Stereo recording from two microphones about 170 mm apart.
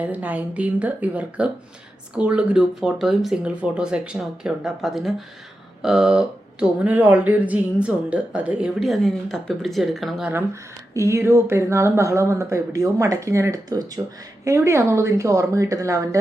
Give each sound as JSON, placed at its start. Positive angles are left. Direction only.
{"t": 0.0, "sound": "speech", "side_deg": -10}